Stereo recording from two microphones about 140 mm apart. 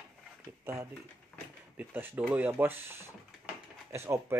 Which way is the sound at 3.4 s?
20° right (ahead or behind).